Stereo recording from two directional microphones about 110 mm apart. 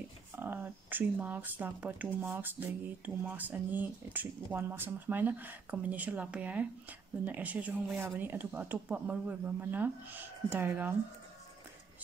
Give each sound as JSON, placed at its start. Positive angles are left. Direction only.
{"t": 0.4, "sound": "speech", "side_deg": -15}